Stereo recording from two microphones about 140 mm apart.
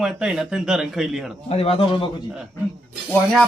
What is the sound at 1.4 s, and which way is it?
Speech, 45° left (ahead or behind).